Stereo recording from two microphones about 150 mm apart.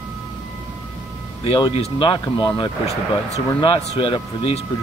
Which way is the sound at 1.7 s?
40° left (ahead or behind).